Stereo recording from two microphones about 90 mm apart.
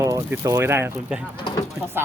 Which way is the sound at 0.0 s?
30° right (ahead or behind).